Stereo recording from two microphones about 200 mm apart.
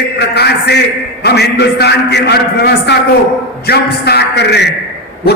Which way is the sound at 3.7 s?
55° left (ahead or behind).